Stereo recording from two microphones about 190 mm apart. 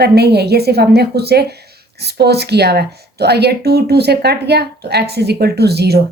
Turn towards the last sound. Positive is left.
turn(degrees=-60)  # may be behind; listen again after turning